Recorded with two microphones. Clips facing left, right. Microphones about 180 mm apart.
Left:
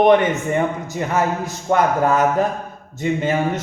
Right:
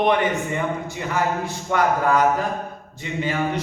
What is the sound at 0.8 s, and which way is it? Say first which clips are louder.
A man's voice: left 3 dB; 40° left (ahead or behind).